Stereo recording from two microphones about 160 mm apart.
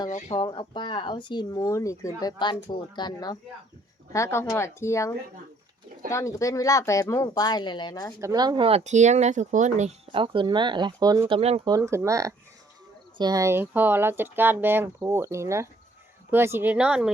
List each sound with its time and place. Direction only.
0.3 s speech: 30° left (ahead or behind)
8.2 s speech: 25° right (ahead or behind); by 9.9 s 45° right (ahead or behind)
10.1 s speech: 30° right (ahead or behind)
11.3 s speech: 40° right (ahead or behind)
11.7 s speech: 15° right (ahead or behind)